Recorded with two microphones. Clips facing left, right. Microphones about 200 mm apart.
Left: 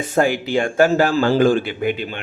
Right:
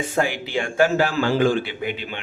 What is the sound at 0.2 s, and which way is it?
A man's voice, 45° left (ahead or behind).